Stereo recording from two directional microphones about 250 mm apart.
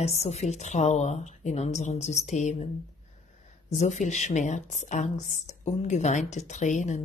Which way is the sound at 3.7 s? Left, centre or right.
Left.